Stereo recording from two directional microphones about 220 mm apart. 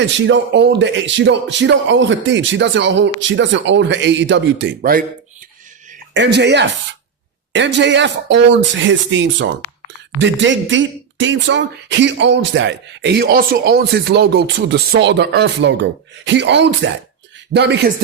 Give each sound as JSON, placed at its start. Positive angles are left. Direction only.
{"t": 0.2, "sound": "speech", "side_deg": -55}
{"t": 6.1, "sound": "speech", "side_deg": -50}